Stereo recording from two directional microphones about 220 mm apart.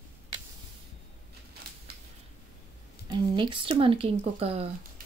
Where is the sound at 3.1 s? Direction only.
20° right (ahead or behind).